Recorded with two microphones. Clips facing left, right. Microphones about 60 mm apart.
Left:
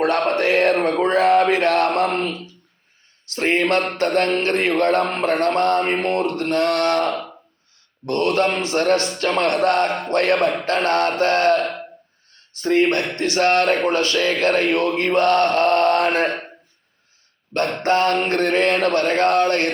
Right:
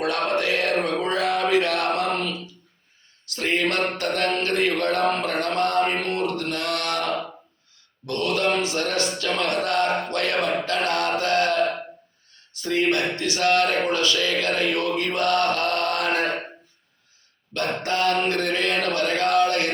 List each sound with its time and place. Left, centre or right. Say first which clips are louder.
0.0 s mantra: left 5 dB; left
3.3 s a sound: left 5 dB; left
3.9 s mantra: left 5 dB; left
17.8 s mantra: left 4 dB; left